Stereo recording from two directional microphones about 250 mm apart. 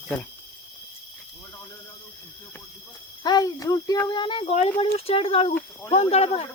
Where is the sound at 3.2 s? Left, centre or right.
Centre.